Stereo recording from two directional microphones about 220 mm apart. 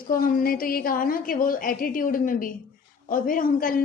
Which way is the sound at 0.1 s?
40° left (ahead or behind).